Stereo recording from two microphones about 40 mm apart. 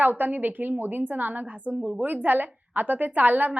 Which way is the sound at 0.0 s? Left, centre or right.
Right.